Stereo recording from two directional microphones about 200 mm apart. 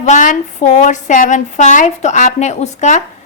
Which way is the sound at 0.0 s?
40° left (ahead or behind).